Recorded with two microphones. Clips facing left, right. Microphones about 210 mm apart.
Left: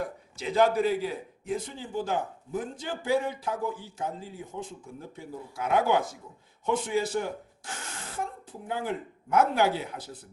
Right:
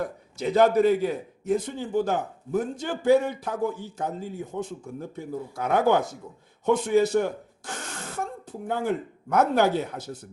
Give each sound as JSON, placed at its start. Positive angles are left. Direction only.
{"t": 0.4, "sound": "a man's voice", "side_deg": -50}
{"t": 8.6, "sound": "a man's voice", "side_deg": -50}